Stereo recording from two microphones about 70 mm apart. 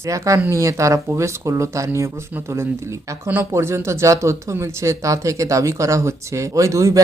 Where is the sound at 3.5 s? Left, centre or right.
Right.